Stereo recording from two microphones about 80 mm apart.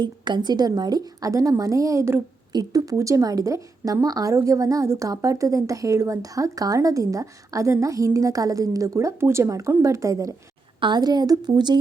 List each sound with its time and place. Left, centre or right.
0.0 s a woman's voice: right
2.5 s a woman's voice: right
10.8 s a woman's voice: right